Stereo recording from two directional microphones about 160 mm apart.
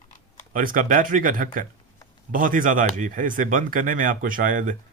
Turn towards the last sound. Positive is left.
turn(degrees=-55)  # may be behind; listen again after turning